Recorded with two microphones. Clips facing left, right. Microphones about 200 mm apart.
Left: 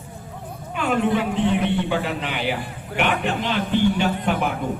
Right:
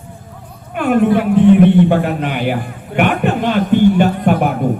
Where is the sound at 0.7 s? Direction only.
55° right (ahead or behind).